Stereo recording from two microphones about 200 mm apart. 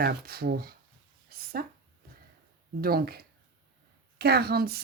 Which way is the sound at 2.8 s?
50° right (ahead or behind).